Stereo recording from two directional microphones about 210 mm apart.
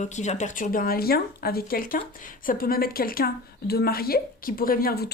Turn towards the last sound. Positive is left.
turn(degrees=45)  # may be behind; listen again after turning